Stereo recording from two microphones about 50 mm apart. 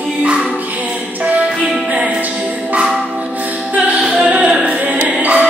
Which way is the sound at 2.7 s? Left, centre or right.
Centre.